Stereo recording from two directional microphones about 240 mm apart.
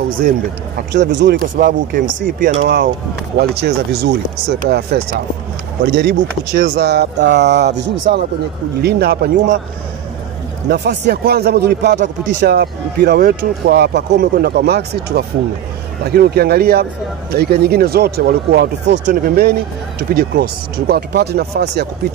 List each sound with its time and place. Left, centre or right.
0.7 s a man's voice: right
3.3 s a man's voice: right
10.7 s a man's voice: right